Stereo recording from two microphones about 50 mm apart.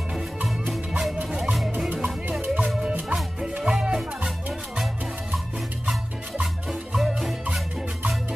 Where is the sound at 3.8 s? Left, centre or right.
Centre.